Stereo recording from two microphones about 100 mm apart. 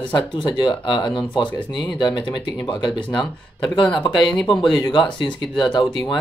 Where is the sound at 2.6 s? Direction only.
50° left (ahead or behind).